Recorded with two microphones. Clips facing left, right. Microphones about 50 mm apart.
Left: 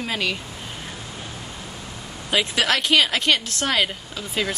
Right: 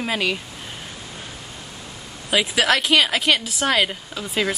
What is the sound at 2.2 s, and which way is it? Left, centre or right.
A woman's voice, centre.